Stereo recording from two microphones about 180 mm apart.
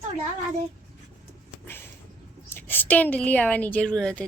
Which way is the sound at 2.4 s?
10° left (ahead or behind).